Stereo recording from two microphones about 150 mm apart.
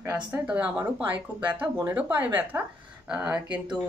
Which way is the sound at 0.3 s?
10° right (ahead or behind).